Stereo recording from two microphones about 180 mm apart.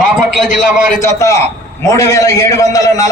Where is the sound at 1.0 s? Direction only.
15° left (ahead or behind).